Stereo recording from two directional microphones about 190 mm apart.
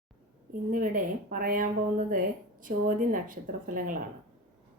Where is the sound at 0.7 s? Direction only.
45° right (ahead or behind).